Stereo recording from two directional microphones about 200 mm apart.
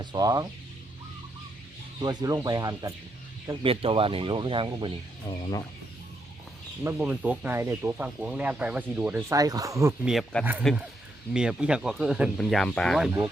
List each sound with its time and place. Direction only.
0.0 s speech: 20° right (ahead or behind)
2.0 s speech: 20° right (ahead or behind)
5.4 s speech: 20° left (ahead or behind)
6.8 s speech: 5° right (ahead or behind)
10.0 s speech: centre (ahead or behind)